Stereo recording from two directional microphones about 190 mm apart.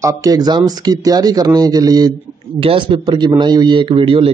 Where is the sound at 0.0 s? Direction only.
20° right (ahead or behind).